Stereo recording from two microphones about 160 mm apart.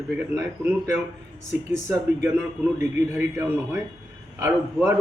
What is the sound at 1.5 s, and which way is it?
Speech, 45° left (ahead or behind).